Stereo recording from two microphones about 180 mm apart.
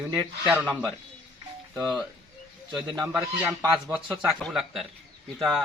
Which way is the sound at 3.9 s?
5° right (ahead or behind).